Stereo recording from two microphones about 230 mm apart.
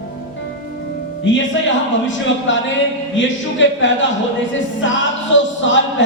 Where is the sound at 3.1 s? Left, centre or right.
Left.